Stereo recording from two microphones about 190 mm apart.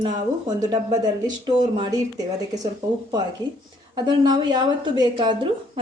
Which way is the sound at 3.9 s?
20° right (ahead or behind).